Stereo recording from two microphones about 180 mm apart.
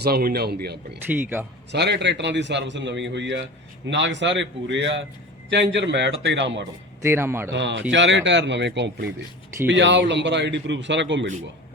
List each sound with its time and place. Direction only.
0.0 s a man's voice: 60° right (ahead or behind)
1.0 s a man's voice: 10° right (ahead or behind)
1.7 s a man's voice: 70° right (ahead or behind); by 6.7 s 85° right
7.0 s a man's voice: 15° right (ahead or behind)
7.5 s a man's voice: 80° right